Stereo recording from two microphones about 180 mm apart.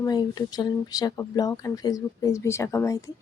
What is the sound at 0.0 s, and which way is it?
Speech, 20° left (ahead or behind).